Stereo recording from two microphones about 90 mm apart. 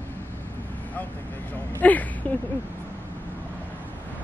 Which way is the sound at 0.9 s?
20° left (ahead or behind).